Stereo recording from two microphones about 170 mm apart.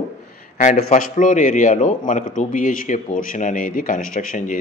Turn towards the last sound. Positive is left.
turn(degrees=50)  # may be behind; listen again after turning